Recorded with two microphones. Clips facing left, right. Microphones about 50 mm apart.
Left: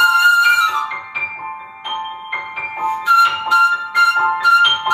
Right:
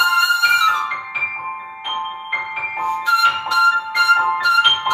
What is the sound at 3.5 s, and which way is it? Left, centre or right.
Music, left.